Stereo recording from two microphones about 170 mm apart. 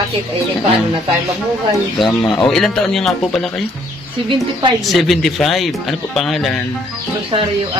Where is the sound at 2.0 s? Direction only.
25° left (ahead or behind).